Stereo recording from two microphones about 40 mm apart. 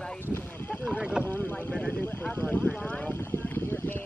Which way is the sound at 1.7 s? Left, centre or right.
Left.